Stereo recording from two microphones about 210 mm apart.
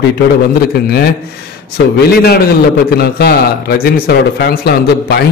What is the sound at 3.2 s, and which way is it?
A man's voice, 45° left (ahead or behind).